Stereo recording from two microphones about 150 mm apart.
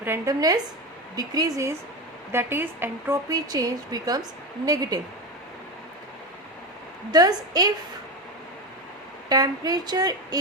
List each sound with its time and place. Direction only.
0.0 s speech: 20° right (ahead or behind)
7.1 s speech: 25° right (ahead or behind)
9.3 s speech: 25° right (ahead or behind)